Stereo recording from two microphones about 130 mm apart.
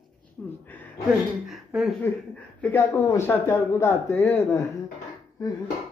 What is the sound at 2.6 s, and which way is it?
Speech, 15° left (ahead or behind).